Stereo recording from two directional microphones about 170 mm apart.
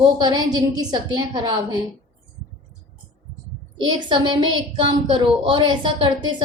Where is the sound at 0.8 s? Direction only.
25° right (ahead or behind).